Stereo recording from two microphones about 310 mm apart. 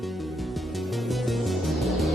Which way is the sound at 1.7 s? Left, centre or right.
Centre.